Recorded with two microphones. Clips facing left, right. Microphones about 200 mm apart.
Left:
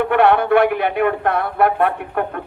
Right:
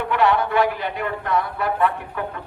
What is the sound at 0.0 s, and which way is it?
A man's voice, 60° left (ahead or behind).